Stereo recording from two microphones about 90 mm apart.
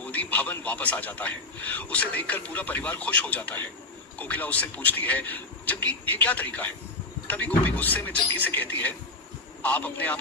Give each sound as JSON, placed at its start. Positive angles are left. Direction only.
{"t": 0.0, "sound": "a man's voice", "side_deg": 20}